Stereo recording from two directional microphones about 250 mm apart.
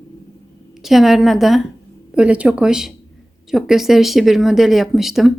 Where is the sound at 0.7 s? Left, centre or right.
Centre.